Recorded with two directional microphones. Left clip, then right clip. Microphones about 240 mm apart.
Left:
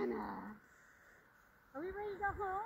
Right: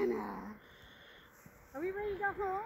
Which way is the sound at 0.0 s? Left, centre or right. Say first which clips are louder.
Right 5 dB; right.